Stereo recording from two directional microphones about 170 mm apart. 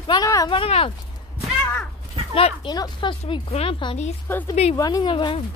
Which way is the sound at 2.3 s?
30° left (ahead or behind).